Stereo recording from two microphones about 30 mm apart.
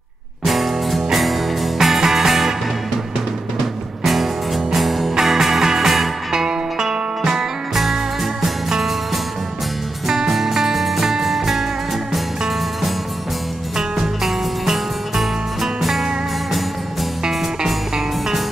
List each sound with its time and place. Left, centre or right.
0.5 s music: centre
4.0 s music: centre
7.7 s music: centre
13.7 s music: centre